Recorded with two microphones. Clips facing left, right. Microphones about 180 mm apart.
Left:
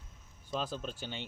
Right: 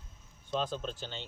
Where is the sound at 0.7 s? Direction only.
10° left (ahead or behind).